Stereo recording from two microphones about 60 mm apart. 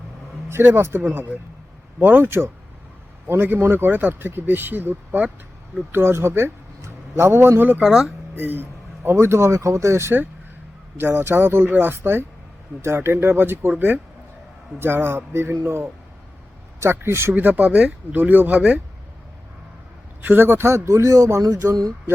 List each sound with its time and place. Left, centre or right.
0.4 s speech: right
5.9 s a man's voice: right
7.8 s speech: centre
8.4 s speech: right
9.0 s speech: right
17.3 s speech: right
20.2 s speech: right
21.7 s speech: right